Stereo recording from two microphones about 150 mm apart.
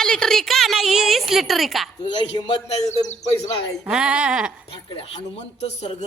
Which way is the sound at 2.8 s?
50° left (ahead or behind).